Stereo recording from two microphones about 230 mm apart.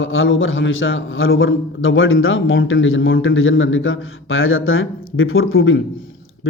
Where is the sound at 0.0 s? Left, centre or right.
Left.